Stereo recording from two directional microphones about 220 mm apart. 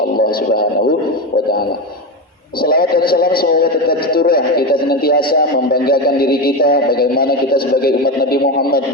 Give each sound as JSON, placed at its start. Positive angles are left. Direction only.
{"t": 0.2, "sound": "radio", "side_deg": 40}
{"t": 2.6, "sound": "a man's voice", "side_deg": 45}